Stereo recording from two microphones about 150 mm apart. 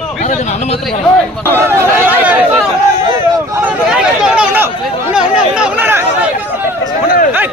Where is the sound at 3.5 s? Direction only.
10° right (ahead or behind).